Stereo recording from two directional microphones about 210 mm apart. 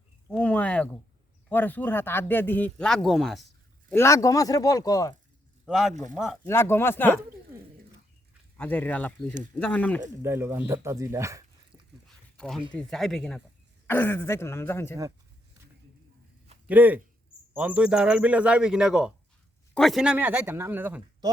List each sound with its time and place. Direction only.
0.3 s a sound: 5° left (ahead or behind)
1.5 s speech: 10° left (ahead or behind)
3.8 s speech: 10° left (ahead or behind)
5.6 s a man's voice: 5° right (ahead or behind)
5.9 s speech: 35° right (ahead or behind)
6.1 s speech: centre (ahead or behind)
6.5 s speech: 10° left (ahead or behind)
8.5 s speech: 10° left (ahead or behind)
10.2 s speech: 10° right (ahead or behind)
12.0 s a sound: centre (ahead or behind)
12.7 s speech: centre (ahead or behind)
16.6 s speech: 10° right (ahead or behind)